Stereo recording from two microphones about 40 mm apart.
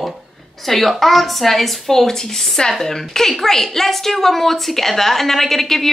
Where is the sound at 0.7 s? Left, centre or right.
Centre.